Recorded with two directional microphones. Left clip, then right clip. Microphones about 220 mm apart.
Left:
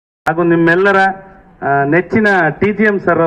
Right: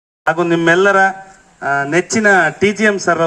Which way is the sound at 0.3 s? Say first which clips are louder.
Left 1 dB; 60° right (ahead or behind).